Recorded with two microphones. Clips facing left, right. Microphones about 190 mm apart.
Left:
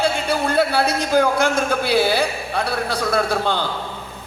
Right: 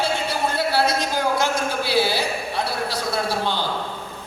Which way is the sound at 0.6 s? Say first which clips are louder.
Left 1 dB; 55° left (ahead or behind).